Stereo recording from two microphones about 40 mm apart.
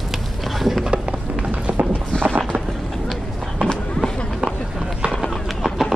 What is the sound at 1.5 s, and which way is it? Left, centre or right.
Music, right.